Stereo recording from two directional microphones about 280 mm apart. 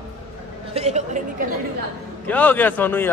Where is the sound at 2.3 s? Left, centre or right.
Centre.